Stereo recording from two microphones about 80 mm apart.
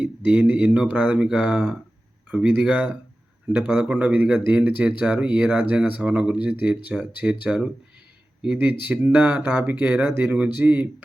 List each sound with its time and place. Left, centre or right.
0.0 s speech: centre